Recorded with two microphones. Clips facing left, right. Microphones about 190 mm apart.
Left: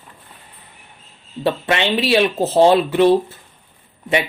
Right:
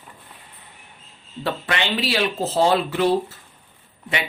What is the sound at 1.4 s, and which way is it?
Speech, 25° left (ahead or behind).